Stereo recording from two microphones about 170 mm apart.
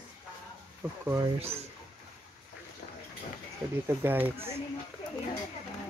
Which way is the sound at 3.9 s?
10° right (ahead or behind).